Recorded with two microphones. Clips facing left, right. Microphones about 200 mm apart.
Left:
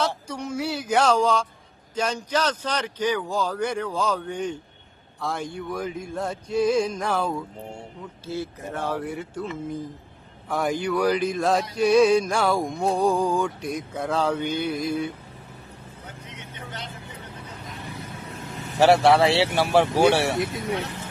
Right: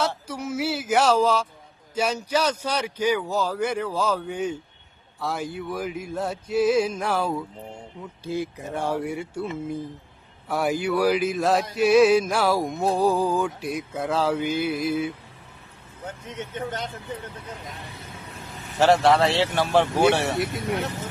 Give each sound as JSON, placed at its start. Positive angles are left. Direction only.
{"t": 0.3, "sound": "speech", "side_deg": -5}
{"t": 5.2, "sound": "a sound", "side_deg": -5}
{"t": 8.2, "sound": "speech", "side_deg": -15}
{"t": 10.5, "sound": "speech", "side_deg": -10}
{"t": 11.8, "sound": "a sound", "side_deg": -5}
{"t": 16.0, "sound": "speech", "side_deg": -50}
{"t": 18.8, "sound": "speech", "side_deg": 10}